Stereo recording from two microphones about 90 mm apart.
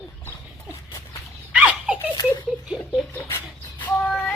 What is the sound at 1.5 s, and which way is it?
Laughter, 15° right (ahead or behind).